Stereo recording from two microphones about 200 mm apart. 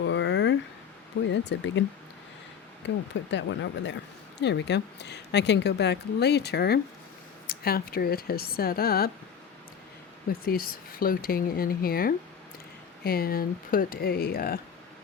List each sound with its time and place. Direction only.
0.0 s a sound: 65° left (ahead or behind)
1.3 s a woman's voice: 65° left (ahead or behind)
2.8 s a woman's voice: 60° left (ahead or behind)
10.4 s speech: 45° left (ahead or behind)